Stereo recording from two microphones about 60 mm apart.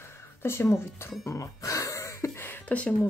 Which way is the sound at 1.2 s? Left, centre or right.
Left.